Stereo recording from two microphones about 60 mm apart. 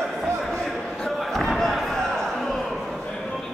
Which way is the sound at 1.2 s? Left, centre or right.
Centre.